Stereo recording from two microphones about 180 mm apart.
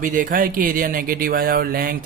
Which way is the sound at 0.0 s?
45° right (ahead or behind).